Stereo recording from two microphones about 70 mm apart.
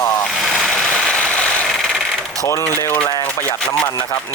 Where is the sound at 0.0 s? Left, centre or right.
Left.